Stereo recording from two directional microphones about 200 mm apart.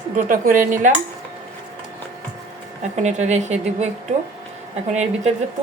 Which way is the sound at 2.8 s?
35° right (ahead or behind).